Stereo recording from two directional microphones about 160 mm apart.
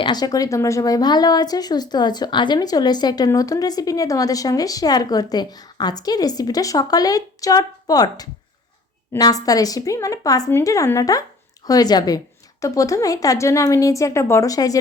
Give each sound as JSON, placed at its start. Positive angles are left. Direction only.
{"t": 0.0, "sound": "speech", "side_deg": 25}